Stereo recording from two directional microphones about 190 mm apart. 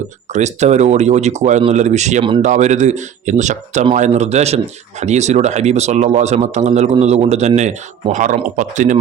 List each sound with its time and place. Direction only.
0.3 s speech: 35° right (ahead or behind)